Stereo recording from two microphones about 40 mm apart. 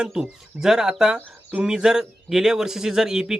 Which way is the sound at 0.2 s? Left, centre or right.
Centre.